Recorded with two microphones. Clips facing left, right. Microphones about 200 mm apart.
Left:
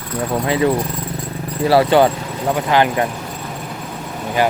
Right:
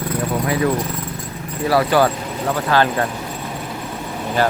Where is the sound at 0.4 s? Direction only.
25° left (ahead or behind).